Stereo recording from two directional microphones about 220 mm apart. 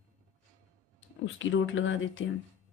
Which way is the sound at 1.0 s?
60° left (ahead or behind).